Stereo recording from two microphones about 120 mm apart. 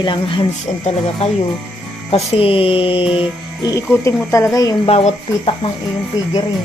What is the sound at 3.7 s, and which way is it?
Speech, 25° left (ahead or behind).